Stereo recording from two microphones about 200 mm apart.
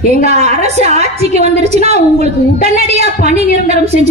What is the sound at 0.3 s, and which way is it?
A woman's voice, 30° right (ahead or behind).